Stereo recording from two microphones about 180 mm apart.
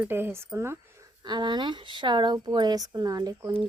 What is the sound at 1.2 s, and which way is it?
Speech, 25° right (ahead or behind).